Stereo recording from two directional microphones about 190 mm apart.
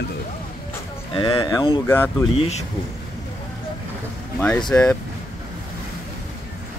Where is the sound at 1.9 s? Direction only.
10° left (ahead or behind).